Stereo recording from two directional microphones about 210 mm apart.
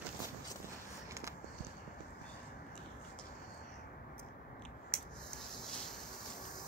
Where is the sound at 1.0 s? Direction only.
15° right (ahead or behind).